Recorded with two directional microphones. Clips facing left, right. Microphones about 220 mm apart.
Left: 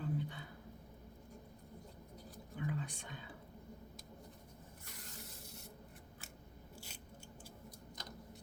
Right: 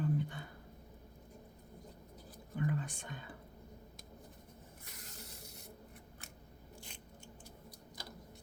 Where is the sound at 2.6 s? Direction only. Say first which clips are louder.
Right 4 dB; 50° right (ahead or behind).